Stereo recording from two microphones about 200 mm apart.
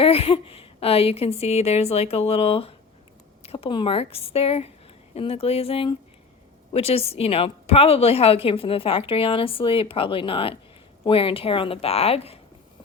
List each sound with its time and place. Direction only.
0.0 s a woman's voice: 30° left (ahead or behind)